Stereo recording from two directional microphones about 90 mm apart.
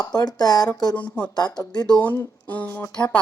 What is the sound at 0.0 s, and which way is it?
Speech, 45° left (ahead or behind).